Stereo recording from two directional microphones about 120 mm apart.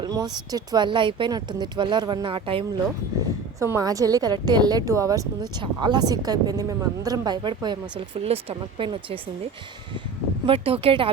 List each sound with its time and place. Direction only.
0.0 s speech: 30° right (ahead or behind)
3.6 s speech: 25° right (ahead or behind)
8.2 s speech: 55° right (ahead or behind)
10.4 s speech: 50° right (ahead or behind)